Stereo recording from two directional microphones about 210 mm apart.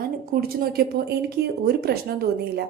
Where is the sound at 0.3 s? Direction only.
45° right (ahead or behind).